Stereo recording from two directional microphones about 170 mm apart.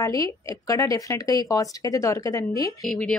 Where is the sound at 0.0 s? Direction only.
20° left (ahead or behind).